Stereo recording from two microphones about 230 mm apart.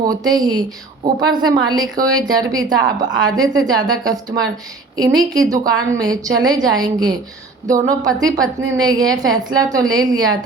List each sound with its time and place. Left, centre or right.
0.1 s a woman's voice: centre